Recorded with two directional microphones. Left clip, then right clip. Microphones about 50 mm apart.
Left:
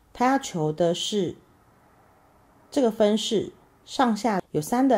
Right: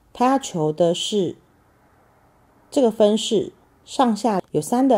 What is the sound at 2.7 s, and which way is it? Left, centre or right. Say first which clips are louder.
A woman's voice: right 5 dB; centre.